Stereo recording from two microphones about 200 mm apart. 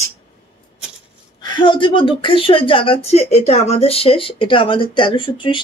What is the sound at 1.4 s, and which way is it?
Speech, 20° left (ahead or behind).